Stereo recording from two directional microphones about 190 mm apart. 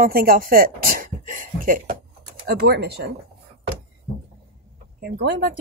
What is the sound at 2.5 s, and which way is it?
Speech, 55° right (ahead or behind).